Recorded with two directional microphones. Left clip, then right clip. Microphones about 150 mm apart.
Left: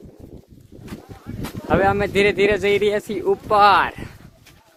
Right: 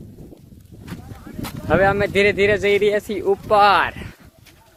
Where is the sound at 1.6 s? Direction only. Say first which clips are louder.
Right 1 dB; 10° left (ahead or behind).